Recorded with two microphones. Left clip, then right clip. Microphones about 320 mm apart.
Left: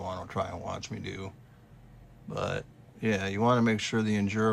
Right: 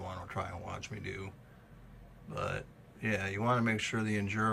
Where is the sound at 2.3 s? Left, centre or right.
Centre.